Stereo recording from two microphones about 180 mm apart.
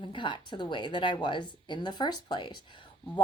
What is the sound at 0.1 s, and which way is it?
Speech, 25° left (ahead or behind).